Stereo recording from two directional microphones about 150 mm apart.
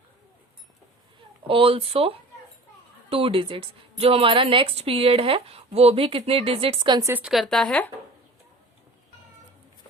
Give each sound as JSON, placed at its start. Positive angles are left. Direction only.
{"t": 1.5, "sound": "a woman's voice", "side_deg": -35}
{"t": 7.0, "sound": "a woman's voice", "side_deg": -10}